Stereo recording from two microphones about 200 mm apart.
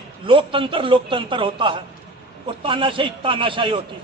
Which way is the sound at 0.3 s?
25° right (ahead or behind).